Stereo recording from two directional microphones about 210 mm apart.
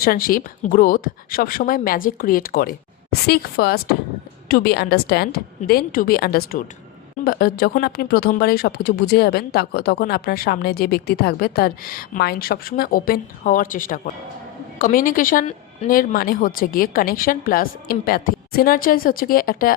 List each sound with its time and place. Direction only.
0.0 s speech: 45° left (ahead or behind)